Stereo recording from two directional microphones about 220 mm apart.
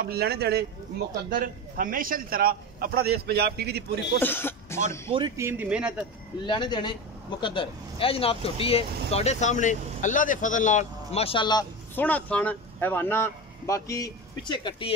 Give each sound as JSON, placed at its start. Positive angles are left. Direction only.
{"t": 0.0, "sound": "a man's voice", "side_deg": -45}
{"t": 4.2, "sound": "speech", "side_deg": 10}
{"t": 5.1, "sound": "speech", "side_deg": -25}
{"t": 5.4, "sound": "speech", "side_deg": -10}
{"t": 6.4, "sound": "speech", "side_deg": 20}
{"t": 12.0, "sound": "speech", "side_deg": 5}